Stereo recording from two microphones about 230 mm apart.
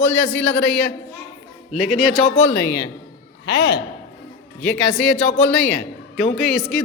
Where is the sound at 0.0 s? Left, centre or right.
Centre.